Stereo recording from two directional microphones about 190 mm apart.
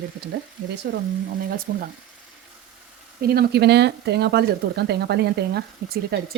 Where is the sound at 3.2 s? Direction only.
55° right (ahead or behind).